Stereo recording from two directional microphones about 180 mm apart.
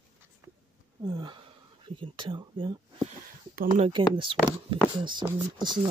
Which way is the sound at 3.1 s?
45° right (ahead or behind).